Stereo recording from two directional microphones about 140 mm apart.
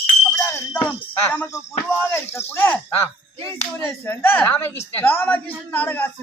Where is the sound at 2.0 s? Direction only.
15° left (ahead or behind).